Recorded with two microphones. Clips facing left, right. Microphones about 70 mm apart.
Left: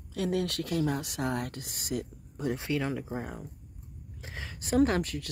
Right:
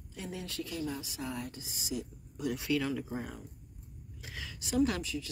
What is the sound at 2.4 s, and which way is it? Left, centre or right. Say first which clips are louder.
Speech: left 1 dB; left.